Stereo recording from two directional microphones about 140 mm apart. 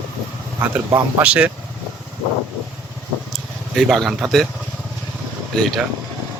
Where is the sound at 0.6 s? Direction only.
10° right (ahead or behind).